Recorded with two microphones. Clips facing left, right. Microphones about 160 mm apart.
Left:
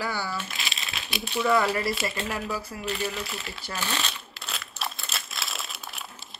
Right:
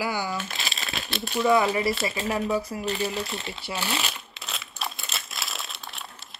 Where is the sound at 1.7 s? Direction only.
Centre (ahead or behind).